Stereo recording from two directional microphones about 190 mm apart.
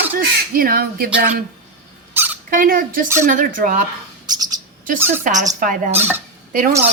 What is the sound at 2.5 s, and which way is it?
Speech, 45° right (ahead or behind).